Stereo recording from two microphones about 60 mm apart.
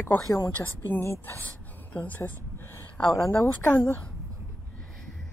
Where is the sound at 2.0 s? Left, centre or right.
Left.